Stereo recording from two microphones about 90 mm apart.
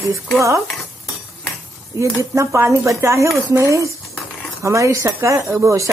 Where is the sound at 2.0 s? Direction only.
35° right (ahead or behind).